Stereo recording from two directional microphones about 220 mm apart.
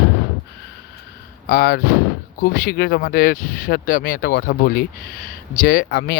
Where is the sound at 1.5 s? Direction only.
40° left (ahead or behind).